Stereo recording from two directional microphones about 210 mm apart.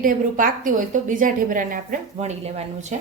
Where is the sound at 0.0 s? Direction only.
40° right (ahead or behind).